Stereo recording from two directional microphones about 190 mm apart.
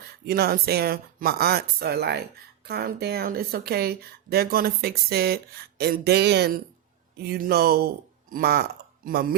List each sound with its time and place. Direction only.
0.3 s speech: 55° right (ahead or behind)